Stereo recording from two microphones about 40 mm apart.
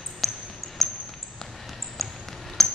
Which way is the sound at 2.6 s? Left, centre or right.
Centre.